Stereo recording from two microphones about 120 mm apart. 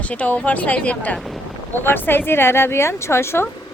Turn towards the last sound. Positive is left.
turn(degrees=20)  # may be behind; listen again after turning